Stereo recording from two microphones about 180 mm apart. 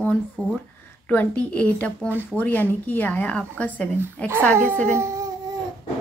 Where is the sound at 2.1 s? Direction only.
10° right (ahead or behind).